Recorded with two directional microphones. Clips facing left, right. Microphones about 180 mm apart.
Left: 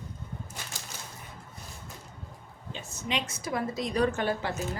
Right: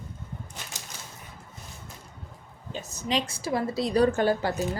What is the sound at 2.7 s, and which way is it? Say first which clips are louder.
A woman's voice: right 5 dB; 40° right (ahead or behind).